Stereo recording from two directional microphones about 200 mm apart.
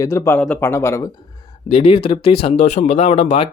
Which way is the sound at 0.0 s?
15° left (ahead or behind).